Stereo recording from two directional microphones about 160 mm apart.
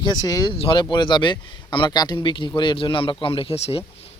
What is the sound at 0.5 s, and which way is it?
Speech, 35° left (ahead or behind).